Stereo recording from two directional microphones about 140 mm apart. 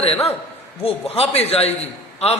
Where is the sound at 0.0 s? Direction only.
45° left (ahead or behind).